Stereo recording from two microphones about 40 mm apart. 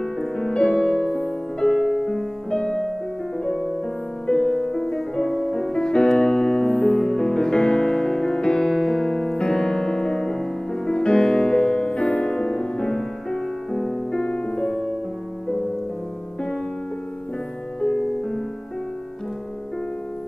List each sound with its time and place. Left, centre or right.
0.0 s music: centre
4.3 s music: centre
5.9 s music: left; by 14.0 s centre
14.1 s music: centre
14.7 s music: centre
17.8 s music: centre